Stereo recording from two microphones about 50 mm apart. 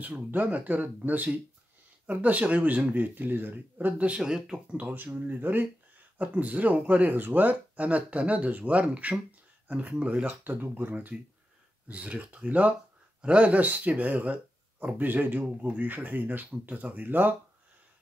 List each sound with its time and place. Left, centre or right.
0.3 s speech: right
4.2 s speech: centre
4.9 s speech: right
10.2 s speech: right
11.9 s speech: right